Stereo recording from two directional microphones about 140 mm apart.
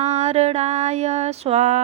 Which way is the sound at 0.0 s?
50° right (ahead or behind).